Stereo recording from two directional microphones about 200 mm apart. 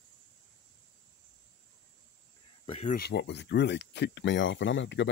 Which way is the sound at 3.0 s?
55° left (ahead or behind).